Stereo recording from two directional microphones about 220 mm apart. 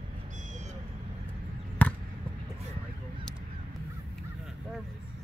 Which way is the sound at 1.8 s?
10° left (ahead or behind).